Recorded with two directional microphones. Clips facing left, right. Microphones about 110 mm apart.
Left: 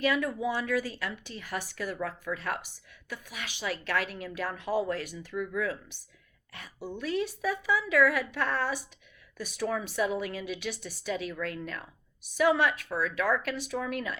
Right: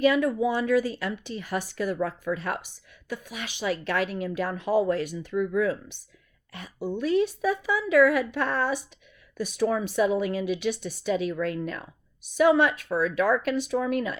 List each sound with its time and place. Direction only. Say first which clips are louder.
0.0 s a woman's voice: right 6 dB; 25° right (ahead or behind)
7.0 s a woman's voice: right 7 dB; 25° right (ahead or behind)